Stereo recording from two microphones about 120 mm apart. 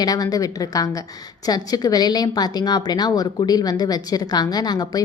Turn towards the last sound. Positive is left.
turn(degrees=35)  # may be behind; listen again after turning